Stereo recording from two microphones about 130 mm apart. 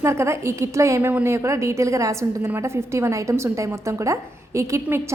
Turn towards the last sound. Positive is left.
turn(degrees=-20)  # may be behind; listen again after turning